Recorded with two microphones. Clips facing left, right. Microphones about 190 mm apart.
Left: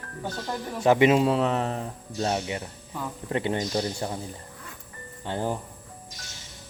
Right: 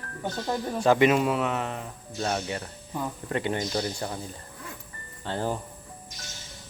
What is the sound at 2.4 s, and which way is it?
Speech, 15° left (ahead or behind).